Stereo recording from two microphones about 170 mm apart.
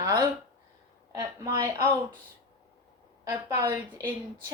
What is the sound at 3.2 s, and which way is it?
Speech, 15° right (ahead or behind).